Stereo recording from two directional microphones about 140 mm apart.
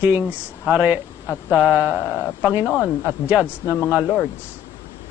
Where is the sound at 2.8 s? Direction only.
20° left (ahead or behind).